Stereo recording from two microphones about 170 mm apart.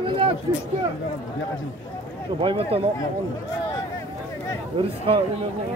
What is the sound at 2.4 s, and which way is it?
Speech, 30° right (ahead or behind).